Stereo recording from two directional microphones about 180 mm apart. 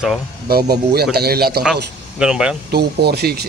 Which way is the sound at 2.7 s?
65° right (ahead or behind).